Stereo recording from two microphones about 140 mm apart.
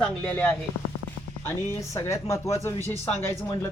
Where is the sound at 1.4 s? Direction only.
20° left (ahead or behind).